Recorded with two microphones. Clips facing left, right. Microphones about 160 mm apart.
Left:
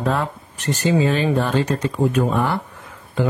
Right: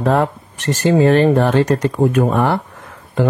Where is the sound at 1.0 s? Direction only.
55° right (ahead or behind).